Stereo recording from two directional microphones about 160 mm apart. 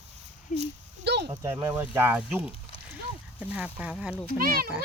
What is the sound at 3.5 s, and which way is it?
Speech, 10° right (ahead or behind).